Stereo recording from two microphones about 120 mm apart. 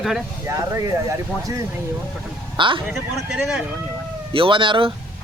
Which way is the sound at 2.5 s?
45° right (ahead or behind).